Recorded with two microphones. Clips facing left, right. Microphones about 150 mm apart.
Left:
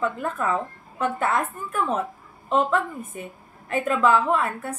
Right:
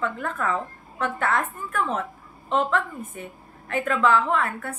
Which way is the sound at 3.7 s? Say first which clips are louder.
Left 1 dB; 15° left (ahead or behind).